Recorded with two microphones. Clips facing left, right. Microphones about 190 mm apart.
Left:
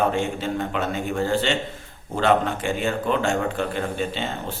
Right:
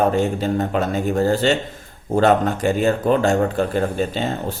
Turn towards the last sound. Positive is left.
turn(degrees=-40)  # may be behind; listen again after turning